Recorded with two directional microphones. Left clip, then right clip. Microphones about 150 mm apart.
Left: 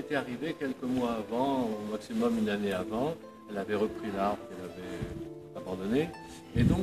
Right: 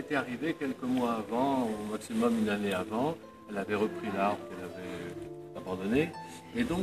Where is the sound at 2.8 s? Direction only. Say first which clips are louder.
Even; 20° left (ahead or behind).